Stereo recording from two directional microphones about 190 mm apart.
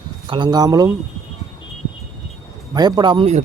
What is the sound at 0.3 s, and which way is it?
Speech, 25° right (ahead or behind).